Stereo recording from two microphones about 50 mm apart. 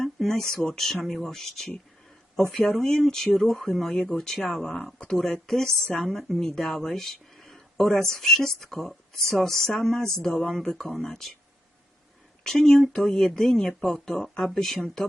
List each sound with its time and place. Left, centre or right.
0.0 s speech: centre
2.8 s speech: centre
12.4 s speech: centre